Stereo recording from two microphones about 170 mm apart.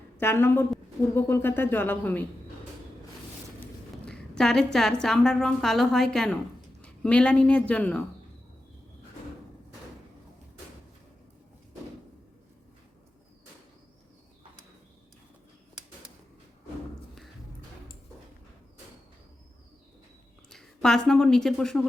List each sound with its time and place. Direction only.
0.2 s speech: 15° left (ahead or behind)
4.0 s a woman's voice: 5° left (ahead or behind)
20.5 s a woman's voice: 5° left (ahead or behind)